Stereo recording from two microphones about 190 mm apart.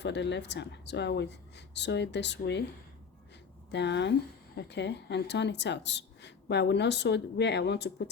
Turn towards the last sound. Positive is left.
turn(degrees=60)  # may be behind; listen again after turning